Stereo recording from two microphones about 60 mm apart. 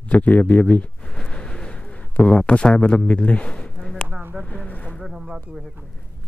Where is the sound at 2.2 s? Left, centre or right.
Centre.